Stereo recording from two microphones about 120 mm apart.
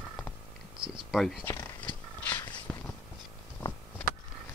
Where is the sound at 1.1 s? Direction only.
Centre (ahead or behind).